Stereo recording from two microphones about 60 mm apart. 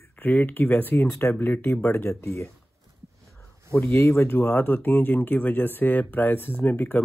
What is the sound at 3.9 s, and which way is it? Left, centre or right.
Speech, left.